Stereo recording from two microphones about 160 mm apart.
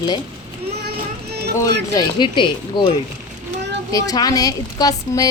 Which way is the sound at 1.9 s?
30° left (ahead or behind).